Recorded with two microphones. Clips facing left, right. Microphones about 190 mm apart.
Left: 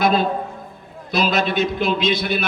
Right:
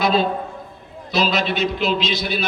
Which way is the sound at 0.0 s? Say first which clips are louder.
Left 1 dB; 50° left (ahead or behind).